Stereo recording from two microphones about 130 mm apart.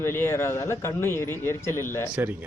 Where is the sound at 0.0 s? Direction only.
20° left (ahead or behind).